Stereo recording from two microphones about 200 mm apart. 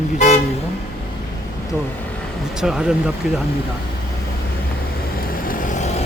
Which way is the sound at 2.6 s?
5° right (ahead or behind).